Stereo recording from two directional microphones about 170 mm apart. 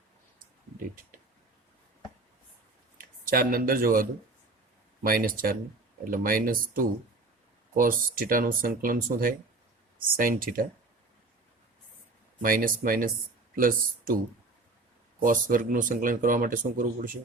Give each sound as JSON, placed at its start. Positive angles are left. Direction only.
{"t": 3.0, "sound": "speech", "side_deg": -60}
{"t": 12.4, "sound": "speech", "side_deg": -55}
{"t": 15.2, "sound": "speech", "side_deg": -55}